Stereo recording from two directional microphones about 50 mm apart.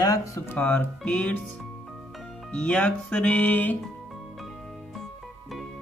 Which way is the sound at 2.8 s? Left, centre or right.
Left.